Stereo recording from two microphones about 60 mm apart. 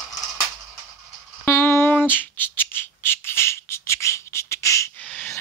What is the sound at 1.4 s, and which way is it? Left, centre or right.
Squawk, left.